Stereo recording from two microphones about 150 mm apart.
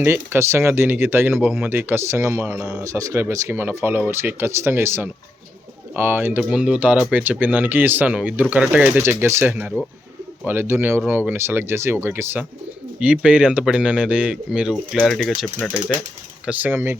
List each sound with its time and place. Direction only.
0.0 s speech: 15° right (ahead or behind)
2.6 s speech: 5° right (ahead or behind)
2.8 s speech: 20° right (ahead or behind); by 15.7 s 5° left (ahead or behind)
16.5 s speech: 10° right (ahead or behind)